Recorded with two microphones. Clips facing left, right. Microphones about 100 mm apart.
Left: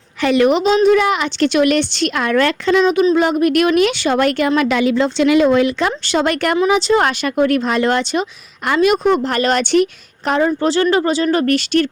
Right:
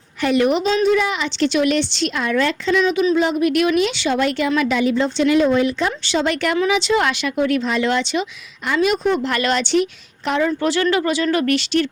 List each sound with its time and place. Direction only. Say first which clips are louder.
0.2 s a woman's voice: left 3 dB; 90° left
0.6 s a woman's voice: left 5 dB; 20° left (ahead or behind)
0.9 s a woman's voice: left 5 dB; 60° left (ahead or behind)
2.7 s a woman's voice: left 4 dB; 45° left (ahead or behind); by 5.9 s 85° left
6.1 s speech: left 3 dB; 55° left (ahead or behind)
6.7 s speech: left 5 dB; 40° left (ahead or behind)
8.6 s a woman's voice: left 4 dB; 60° left (ahead or behind)
9.2 s speech: left 3 dB; 40° left (ahead or behind)
10.2 s speech: left 3 dB; 40° left (ahead or behind)